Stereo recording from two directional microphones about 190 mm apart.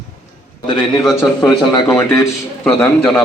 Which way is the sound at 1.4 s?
20° left (ahead or behind).